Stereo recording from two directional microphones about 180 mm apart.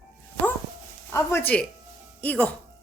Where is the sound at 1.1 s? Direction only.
15° left (ahead or behind).